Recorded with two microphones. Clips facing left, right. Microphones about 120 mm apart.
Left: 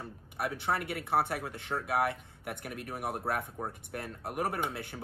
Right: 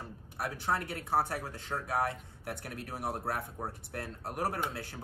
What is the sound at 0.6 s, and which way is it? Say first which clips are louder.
A man's voice: right 1 dB; 65° left (ahead or behind).